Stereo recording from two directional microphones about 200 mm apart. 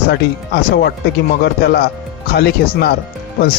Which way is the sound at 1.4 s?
55° left (ahead or behind).